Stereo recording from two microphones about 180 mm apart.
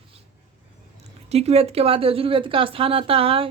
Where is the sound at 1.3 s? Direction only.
35° right (ahead or behind).